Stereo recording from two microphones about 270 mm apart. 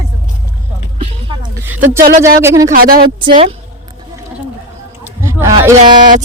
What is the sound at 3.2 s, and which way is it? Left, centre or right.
Speech, centre.